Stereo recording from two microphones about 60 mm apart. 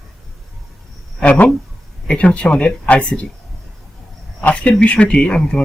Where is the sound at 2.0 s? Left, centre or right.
Centre.